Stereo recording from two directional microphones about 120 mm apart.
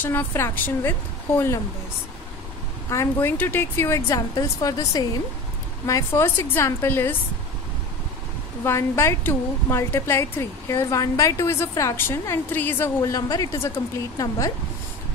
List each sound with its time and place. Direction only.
0.0 s a woman's voice: 20° left (ahead or behind)
2.9 s a woman's voice: 20° left (ahead or behind)
8.6 s a woman's voice: 20° left (ahead or behind)